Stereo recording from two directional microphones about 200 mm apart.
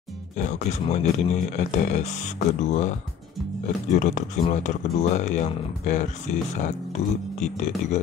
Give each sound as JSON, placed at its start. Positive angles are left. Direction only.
{"t": 0.4, "sound": "speech", "side_deg": 35}